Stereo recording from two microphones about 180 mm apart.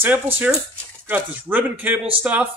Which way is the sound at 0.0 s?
10° right (ahead or behind).